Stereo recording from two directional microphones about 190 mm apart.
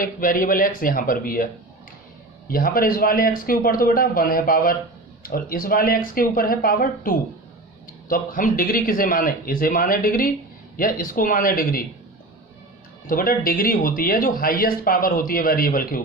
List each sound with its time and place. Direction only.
0.0 s speech: 45° left (ahead or behind)
2.5 s speech: 50° left (ahead or behind)
13.1 s speech: 50° left (ahead or behind)